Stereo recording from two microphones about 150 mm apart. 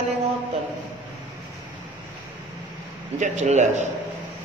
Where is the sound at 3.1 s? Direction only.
50° right (ahead or behind).